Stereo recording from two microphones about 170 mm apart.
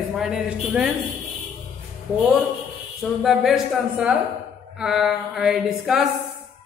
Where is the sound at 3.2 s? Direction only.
Centre (ahead or behind).